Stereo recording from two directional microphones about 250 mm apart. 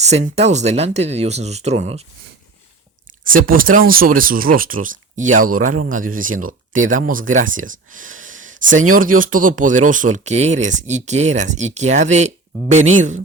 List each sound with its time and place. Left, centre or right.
0.0 s speech: right
3.2 s speech: right